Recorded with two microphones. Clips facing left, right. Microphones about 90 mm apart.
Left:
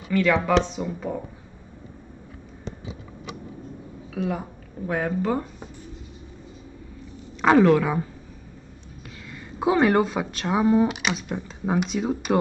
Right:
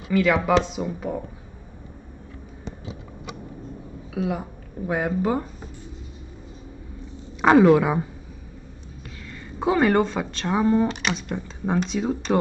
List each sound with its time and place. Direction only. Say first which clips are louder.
0.1 s a woman's voice: right 1 dB; 10° right (ahead or behind)
4.1 s speech: right 1 dB; 5° right (ahead or behind)
7.4 s a woman's voice: right 2 dB; 15° right (ahead or behind)
9.3 s speech: even; 5° left (ahead or behind)